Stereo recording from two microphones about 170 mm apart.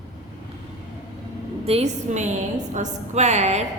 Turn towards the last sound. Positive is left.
turn(degrees=-40)  # may be behind; listen again after turning